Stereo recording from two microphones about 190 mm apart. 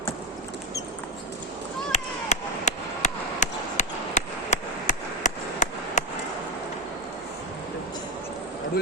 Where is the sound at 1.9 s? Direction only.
35° left (ahead or behind).